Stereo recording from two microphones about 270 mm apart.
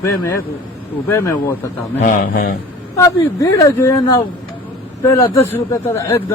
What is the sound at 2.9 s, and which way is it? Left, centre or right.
A man's voice, centre.